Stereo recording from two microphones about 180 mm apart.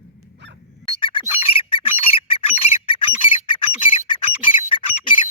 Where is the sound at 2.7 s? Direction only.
30° left (ahead or behind).